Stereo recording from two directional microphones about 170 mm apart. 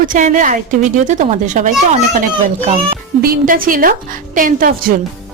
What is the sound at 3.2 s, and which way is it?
A woman's voice, 55° right (ahead or behind).